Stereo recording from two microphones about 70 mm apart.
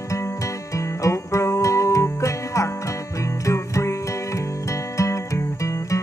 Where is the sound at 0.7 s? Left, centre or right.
Left.